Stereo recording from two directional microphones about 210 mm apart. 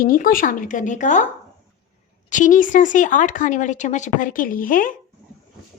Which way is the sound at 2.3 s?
40° left (ahead or behind).